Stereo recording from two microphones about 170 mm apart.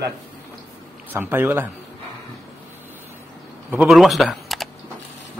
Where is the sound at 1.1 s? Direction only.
10° right (ahead or behind).